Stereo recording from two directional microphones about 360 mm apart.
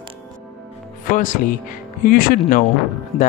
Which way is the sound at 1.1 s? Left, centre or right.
Left.